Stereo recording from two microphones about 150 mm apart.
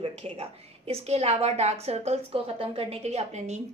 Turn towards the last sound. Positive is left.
turn(degrees=-50)  # may be behind; listen again after turning